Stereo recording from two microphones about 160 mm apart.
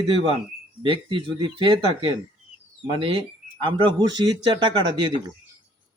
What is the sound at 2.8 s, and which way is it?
A man's voice, 30° right (ahead or behind).